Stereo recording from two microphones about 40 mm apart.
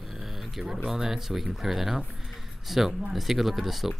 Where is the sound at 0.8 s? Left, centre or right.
Centre.